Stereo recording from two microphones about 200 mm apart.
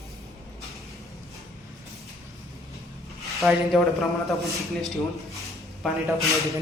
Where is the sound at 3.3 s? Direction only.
Centre (ahead or behind).